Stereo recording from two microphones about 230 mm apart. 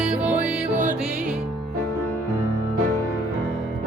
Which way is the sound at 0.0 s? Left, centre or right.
Centre.